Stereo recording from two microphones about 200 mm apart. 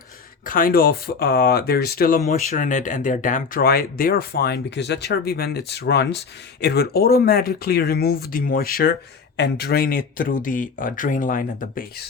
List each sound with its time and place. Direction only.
0.4 s speech: 45° left (ahead or behind)